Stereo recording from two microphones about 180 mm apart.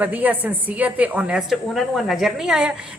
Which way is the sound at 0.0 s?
10° right (ahead or behind).